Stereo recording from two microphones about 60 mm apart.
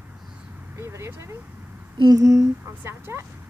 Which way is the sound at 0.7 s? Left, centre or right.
Right.